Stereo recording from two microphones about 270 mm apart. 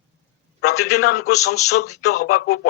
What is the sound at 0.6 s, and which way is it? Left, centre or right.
A man's voice, left.